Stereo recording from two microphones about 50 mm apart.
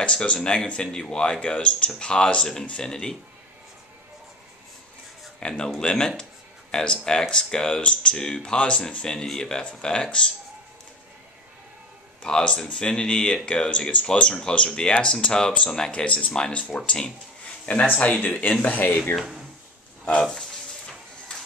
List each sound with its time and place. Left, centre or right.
0.0 s speech: left
5.4 s speech: centre
12.2 s speech: centre
15.9 s speech: left
19.1 s speech: centre